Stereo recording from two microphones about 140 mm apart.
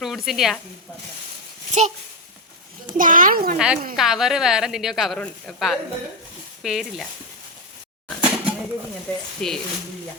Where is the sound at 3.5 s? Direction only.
5° right (ahead or behind).